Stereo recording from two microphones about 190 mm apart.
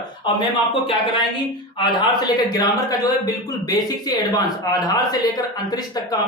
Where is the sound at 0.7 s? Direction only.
30° left (ahead or behind).